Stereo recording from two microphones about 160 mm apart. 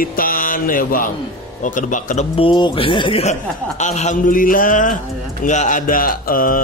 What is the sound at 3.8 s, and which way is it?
A man's voice, 45° left (ahead or behind).